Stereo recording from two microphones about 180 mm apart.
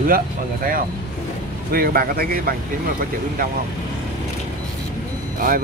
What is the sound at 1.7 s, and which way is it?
Speech, 55° right (ahead or behind).